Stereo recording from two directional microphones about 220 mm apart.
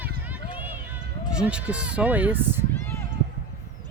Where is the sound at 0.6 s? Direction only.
10° right (ahead or behind).